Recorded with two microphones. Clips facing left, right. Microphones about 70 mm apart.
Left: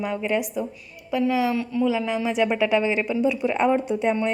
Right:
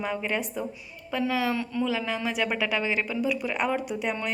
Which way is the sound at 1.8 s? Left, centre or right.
Centre.